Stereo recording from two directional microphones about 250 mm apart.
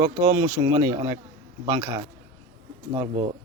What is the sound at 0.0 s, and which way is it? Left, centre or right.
Speech, centre.